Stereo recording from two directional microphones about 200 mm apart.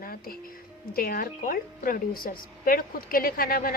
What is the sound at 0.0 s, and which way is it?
A woman's voice, 45° left (ahead or behind).